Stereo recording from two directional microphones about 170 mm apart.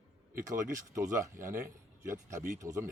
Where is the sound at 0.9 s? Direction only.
15° right (ahead or behind).